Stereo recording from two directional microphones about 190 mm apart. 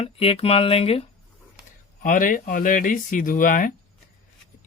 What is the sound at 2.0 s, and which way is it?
Speech, 45° left (ahead or behind).